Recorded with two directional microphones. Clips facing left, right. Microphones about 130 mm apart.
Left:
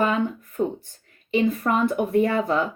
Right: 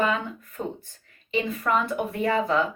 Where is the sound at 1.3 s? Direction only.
40° left (ahead or behind).